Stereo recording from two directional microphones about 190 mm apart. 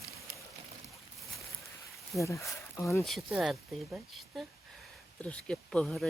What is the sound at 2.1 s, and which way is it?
Speech, 15° left (ahead or behind).